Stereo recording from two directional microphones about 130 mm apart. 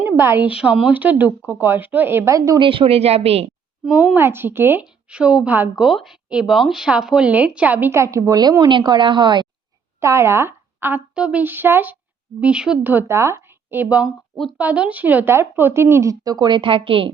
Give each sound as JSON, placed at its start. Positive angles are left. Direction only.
{"t": 0.0, "sound": "a woman's voice", "side_deg": -15}
{"t": 2.6, "sound": "speech", "side_deg": -45}
{"t": 3.9, "sound": "a woman's voice", "side_deg": -15}
{"t": 10.0, "sound": "a woman's voice", "side_deg": -20}